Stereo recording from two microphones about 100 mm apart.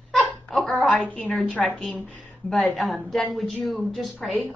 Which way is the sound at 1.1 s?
10° left (ahead or behind).